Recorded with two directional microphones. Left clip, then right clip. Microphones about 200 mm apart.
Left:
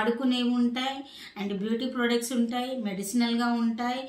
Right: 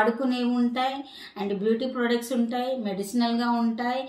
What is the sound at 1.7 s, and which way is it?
A woman's voice, 15° left (ahead or behind).